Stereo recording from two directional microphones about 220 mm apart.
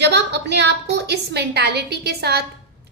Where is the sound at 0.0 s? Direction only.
50° right (ahead or behind).